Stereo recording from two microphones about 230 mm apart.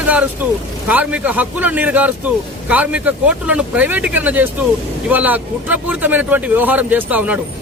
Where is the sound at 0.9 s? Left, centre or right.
Centre.